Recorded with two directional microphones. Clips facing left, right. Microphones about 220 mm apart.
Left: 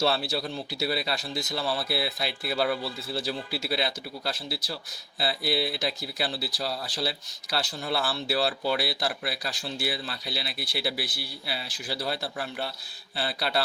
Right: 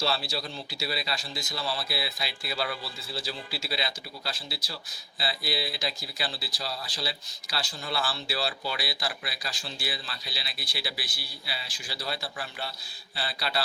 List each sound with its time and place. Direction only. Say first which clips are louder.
0.0 s a man's voice: left 4 dB; 55° left (ahead or behind)